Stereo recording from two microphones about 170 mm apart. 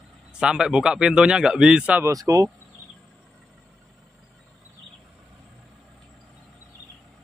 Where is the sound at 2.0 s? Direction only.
20° right (ahead or behind).